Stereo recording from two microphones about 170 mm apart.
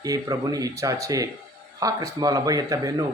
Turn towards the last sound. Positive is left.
turn(degrees=-20)  # may be behind; listen again after turning